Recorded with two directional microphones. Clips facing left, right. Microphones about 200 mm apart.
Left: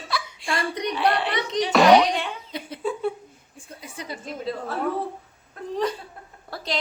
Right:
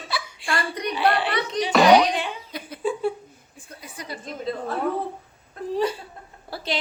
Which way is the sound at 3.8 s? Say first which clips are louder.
Left 1 dB; 25° left (ahead or behind).